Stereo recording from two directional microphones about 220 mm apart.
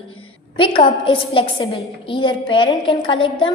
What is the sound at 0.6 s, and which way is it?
A woman's voice, 20° left (ahead or behind).